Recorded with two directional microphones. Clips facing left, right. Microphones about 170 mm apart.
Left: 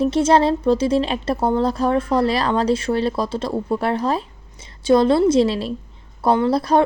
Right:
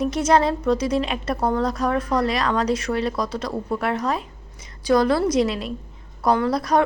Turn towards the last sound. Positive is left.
turn(degrees=30)  # may be behind; listen again after turning